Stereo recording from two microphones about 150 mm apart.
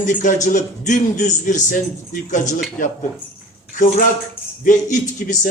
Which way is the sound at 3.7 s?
65° left (ahead or behind).